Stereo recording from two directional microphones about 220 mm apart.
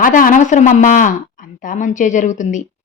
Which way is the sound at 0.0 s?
40° left (ahead or behind).